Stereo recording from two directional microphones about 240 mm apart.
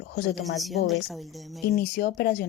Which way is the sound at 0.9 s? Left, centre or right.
Centre.